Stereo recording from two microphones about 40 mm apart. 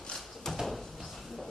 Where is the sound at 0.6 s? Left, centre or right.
Centre.